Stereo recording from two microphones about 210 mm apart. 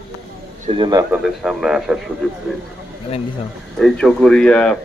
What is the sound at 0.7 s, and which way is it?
Speech, 20° right (ahead or behind).